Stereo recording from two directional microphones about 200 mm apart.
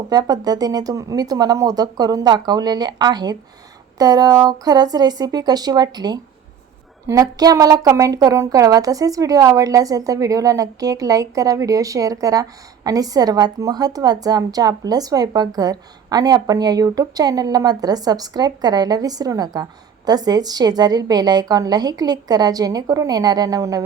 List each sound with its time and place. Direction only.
0.1 s a woman's voice: 20° right (ahead or behind)